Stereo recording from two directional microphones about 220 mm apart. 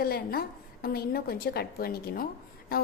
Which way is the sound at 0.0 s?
45° left (ahead or behind).